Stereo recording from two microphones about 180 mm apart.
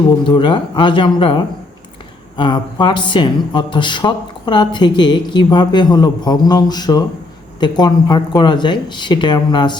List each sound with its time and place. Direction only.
0.3 s speech: 30° left (ahead or behind)